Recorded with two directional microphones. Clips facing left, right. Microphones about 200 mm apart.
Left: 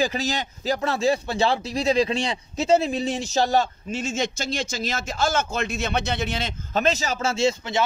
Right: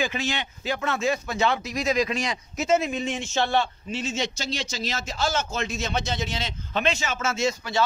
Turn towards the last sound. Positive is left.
turn(degrees=25)  # may be behind; listen again after turning